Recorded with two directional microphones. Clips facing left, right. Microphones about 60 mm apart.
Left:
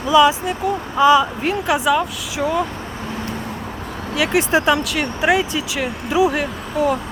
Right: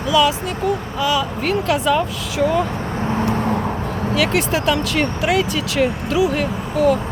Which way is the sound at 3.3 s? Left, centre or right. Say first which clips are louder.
Right 8 dB; right.